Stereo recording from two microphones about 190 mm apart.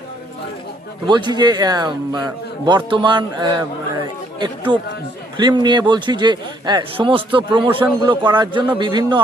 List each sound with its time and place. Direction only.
1.0 s speech: 25° right (ahead or behind)
4.7 s speech: 25° right (ahead or behind)